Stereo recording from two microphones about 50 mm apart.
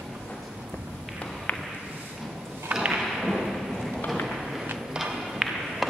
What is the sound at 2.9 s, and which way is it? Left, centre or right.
Thump, centre.